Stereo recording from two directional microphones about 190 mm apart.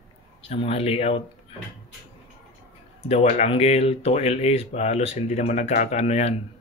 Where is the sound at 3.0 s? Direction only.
35° left (ahead or behind).